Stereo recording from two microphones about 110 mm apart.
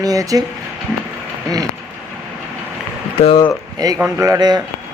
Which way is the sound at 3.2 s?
60° left (ahead or behind).